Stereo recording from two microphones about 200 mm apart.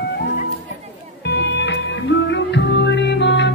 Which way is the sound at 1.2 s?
60° left (ahead or behind).